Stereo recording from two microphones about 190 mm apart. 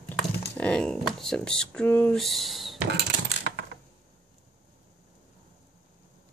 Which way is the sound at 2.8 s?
65° right (ahead or behind).